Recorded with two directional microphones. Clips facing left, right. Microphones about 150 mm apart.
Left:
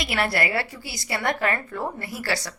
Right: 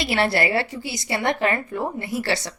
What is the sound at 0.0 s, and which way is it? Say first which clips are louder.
A woman's voice: right 4 dB; 30° right (ahead or behind).